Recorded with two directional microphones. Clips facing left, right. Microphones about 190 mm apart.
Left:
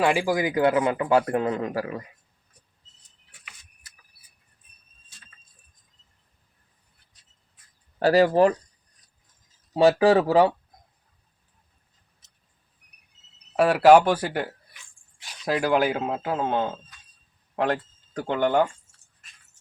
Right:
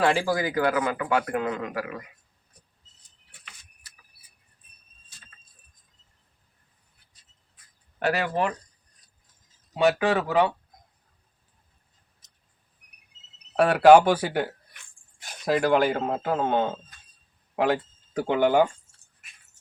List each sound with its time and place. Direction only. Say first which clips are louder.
0.0 s speech: left 1 dB; 15° left (ahead or behind); by 2.0 s 30° left (ahead or behind)
7.9 s speech: left 8 dB; 35° left (ahead or behind)
9.7 s speech: left 5 dB; 35° left (ahead or behind)
13.6 s speech: even; 5° left (ahead or behind)
14.7 s dog: left 1 dB; 55° right (ahead or behind)
15.4 s speech: right 1 dB; centre (ahead or behind)